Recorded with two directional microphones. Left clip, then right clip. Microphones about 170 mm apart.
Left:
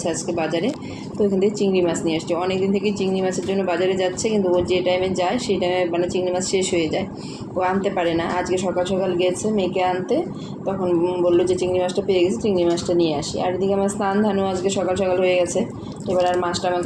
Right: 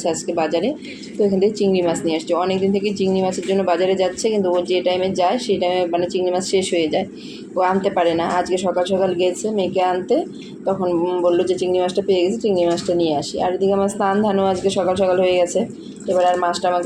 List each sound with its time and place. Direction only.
0.0 s a woman's voice: 50° right (ahead or behind)